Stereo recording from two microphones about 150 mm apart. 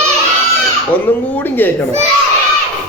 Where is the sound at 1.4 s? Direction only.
15° left (ahead or behind).